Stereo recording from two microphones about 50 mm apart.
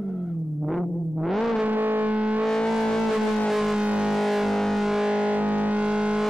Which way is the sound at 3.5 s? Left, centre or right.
Centre.